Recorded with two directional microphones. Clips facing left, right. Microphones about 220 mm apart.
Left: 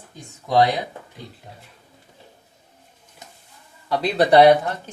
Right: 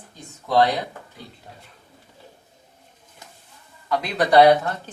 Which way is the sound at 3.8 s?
35° left (ahead or behind).